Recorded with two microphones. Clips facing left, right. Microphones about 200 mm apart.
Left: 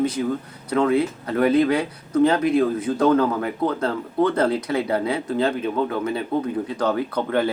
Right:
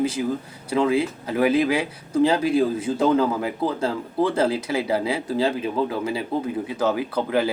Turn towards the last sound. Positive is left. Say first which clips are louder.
# even
turn(degrees=-5)  # may be behind; listen again after turning